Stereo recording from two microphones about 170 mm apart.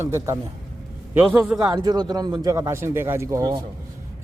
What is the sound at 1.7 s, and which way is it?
Speech, 25° right (ahead or behind).